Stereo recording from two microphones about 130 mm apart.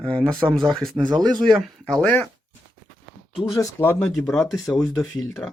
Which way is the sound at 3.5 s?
20° left (ahead or behind).